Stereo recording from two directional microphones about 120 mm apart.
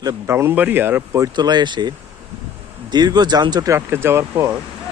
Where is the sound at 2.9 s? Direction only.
35° right (ahead or behind).